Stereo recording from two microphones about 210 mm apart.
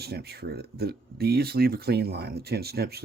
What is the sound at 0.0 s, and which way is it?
Speech, 50° right (ahead or behind).